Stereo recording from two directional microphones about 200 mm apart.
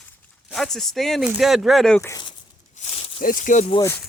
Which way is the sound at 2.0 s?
15° left (ahead or behind).